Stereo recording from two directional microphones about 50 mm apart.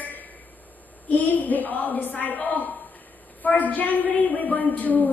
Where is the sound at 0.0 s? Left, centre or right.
Left.